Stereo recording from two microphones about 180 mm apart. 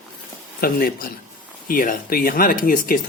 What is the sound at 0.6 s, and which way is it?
Speech, 55° left (ahead or behind).